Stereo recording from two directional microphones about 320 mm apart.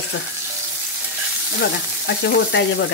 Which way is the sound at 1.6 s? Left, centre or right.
Left.